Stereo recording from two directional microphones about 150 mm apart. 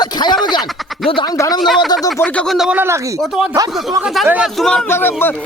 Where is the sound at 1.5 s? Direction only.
Centre (ahead or behind).